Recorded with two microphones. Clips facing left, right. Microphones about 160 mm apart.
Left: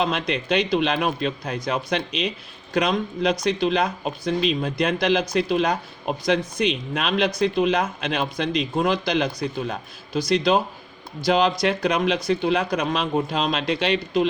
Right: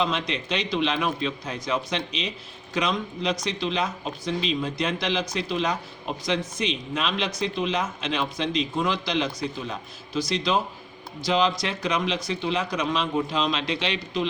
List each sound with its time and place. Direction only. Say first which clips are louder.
0.0 s speech: left 3 dB; 55° left (ahead or behind)